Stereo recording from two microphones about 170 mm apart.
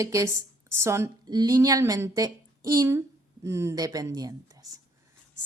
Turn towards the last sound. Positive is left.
turn(degrees=-20)  # may be behind; listen again after turning